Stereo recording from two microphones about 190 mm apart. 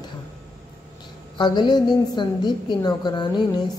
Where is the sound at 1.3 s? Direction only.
25° left (ahead or behind).